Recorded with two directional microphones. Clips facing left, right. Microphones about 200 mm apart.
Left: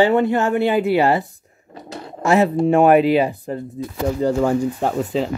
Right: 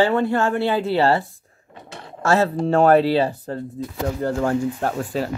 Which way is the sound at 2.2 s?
15° left (ahead or behind).